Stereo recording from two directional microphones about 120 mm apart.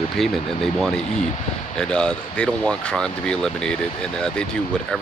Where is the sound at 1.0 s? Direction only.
70° left (ahead or behind).